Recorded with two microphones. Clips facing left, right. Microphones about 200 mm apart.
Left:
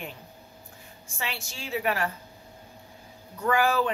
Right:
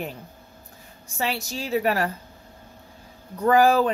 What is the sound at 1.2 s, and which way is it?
Speech, 40° right (ahead or behind).